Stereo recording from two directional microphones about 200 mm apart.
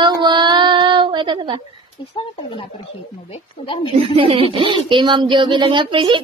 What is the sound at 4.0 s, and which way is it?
Child singing, 25° right (ahead or behind).